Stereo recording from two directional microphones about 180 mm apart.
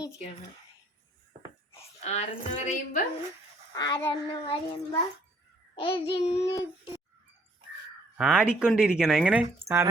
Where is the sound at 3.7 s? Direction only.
20° left (ahead or behind).